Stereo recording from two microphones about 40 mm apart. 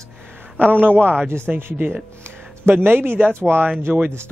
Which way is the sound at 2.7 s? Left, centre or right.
Right.